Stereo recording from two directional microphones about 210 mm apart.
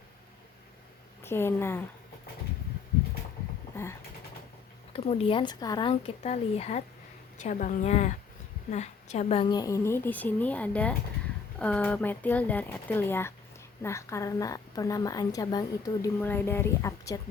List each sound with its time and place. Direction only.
1.2 s a woman's voice: 10° left (ahead or behind)
4.9 s a woman's voice: 25° left (ahead or behind)